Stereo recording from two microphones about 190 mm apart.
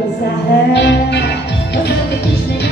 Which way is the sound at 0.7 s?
65° left (ahead or behind).